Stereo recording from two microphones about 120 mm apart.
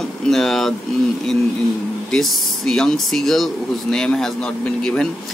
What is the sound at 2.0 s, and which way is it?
Speech, centre (ahead or behind).